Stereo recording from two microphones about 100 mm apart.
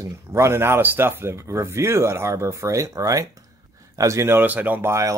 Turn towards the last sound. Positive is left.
turn(degrees=-30)  # may be behind; listen again after turning